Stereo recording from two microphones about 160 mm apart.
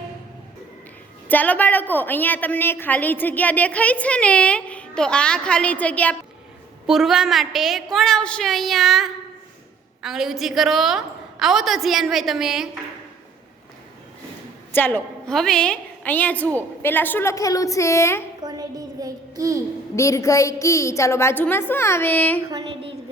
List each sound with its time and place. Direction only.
1.3 s a woman's voice: 10° left (ahead or behind)
6.8 s a woman's voice: centre (ahead or behind)
14.7 s a woman's voice: 10° left (ahead or behind)
18.4 s a sound: 25° right (ahead or behind)
20.0 s a woman's voice: 20° left (ahead or behind)